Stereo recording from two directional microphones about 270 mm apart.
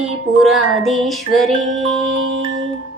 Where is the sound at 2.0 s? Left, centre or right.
Right.